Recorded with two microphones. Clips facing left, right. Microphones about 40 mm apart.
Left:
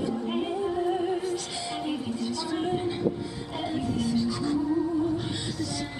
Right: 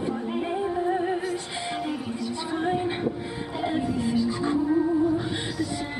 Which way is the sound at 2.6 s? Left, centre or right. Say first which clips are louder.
Right 4 dB; centre.